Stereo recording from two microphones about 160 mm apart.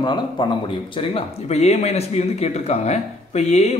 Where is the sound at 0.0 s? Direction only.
30° left (ahead or behind).